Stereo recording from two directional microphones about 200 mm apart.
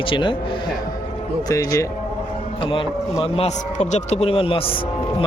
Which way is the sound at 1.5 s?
15° left (ahead or behind).